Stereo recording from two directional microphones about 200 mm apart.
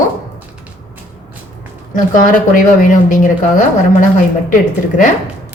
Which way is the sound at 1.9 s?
40° left (ahead or behind).